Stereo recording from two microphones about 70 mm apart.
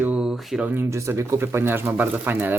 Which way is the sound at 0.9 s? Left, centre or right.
Right.